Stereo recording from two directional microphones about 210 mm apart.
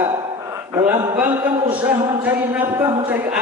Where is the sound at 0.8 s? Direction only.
10° right (ahead or behind).